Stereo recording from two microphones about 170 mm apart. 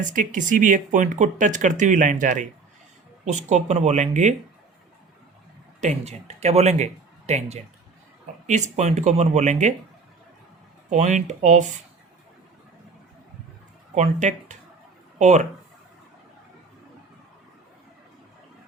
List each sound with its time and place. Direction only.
0.1 s speech: 50° right (ahead or behind)
5.8 s speech: 40° right (ahead or behind)
10.8 s speech: 45° right (ahead or behind)
13.9 s speech: 45° right (ahead or behind)